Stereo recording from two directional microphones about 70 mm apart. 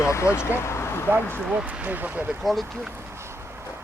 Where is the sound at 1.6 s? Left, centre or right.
Right.